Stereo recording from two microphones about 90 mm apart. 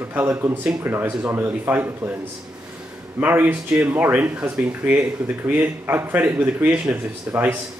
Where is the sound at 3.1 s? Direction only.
25° right (ahead or behind).